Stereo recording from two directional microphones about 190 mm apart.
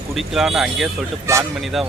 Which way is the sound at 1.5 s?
Centre (ahead or behind).